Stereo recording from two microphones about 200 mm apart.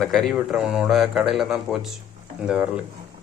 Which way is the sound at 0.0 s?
Centre (ahead or behind).